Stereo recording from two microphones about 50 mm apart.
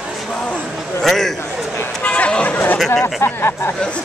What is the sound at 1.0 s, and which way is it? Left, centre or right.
Speech, centre.